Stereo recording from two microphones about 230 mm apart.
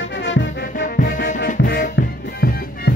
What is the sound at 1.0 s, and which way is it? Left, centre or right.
Music, left.